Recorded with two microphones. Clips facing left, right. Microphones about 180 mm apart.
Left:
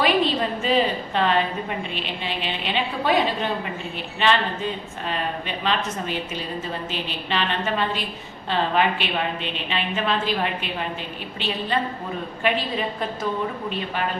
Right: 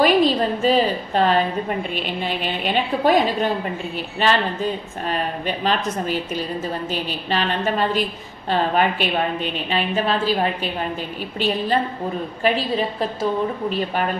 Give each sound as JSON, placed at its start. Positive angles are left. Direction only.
{"t": 0.0, "sound": "a woman's voice", "side_deg": -40}
{"t": 6.9, "sound": "a woman's voice", "side_deg": -40}